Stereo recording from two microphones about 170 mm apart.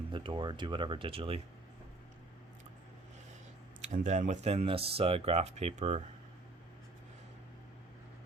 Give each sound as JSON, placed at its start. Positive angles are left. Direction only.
{"t": 0.1, "sound": "speech", "side_deg": -30}
{"t": 3.8, "sound": "speech", "side_deg": -45}